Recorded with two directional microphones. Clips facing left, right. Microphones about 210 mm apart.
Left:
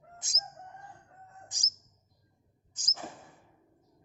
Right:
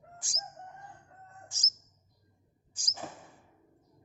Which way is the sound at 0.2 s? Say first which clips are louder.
Even; 20° left (ahead or behind).